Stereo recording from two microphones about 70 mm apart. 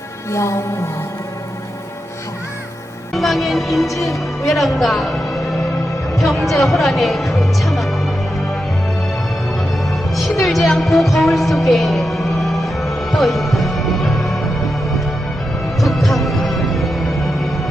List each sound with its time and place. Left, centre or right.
0.3 s music: left
3.1 s speech: centre
10.2 s music: centre
15.8 s music: centre